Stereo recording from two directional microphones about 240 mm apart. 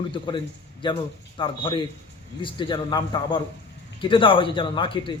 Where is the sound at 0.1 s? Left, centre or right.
Left.